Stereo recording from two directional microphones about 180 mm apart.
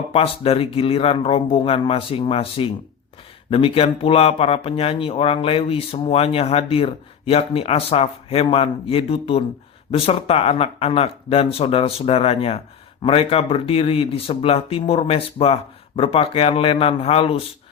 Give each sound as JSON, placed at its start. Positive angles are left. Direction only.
{"t": 0.1, "sound": "speech", "side_deg": 35}